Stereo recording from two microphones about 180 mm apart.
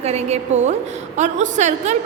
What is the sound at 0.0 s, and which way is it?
A woman's voice, 35° right (ahead or behind).